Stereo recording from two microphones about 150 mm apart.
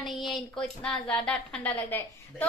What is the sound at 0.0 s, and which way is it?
Speech, centre (ahead or behind).